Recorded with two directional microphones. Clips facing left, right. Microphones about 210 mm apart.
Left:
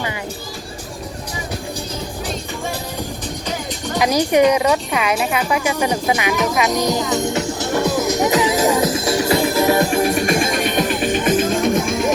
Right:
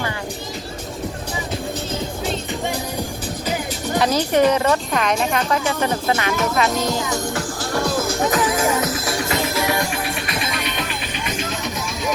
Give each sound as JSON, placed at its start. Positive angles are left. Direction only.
{"t": 3.9, "sound": "speech", "side_deg": 10}
{"t": 8.4, "sound": "music", "side_deg": 25}
{"t": 9.8, "sound": "music", "side_deg": 40}